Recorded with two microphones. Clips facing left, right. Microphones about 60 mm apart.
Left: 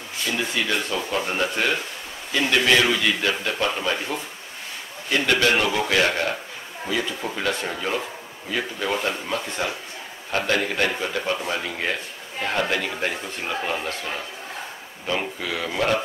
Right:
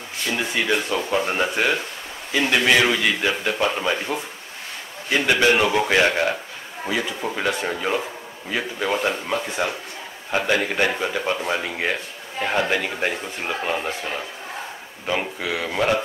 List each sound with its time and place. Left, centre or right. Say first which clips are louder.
0.3 s a man's voice: right 2 dB; centre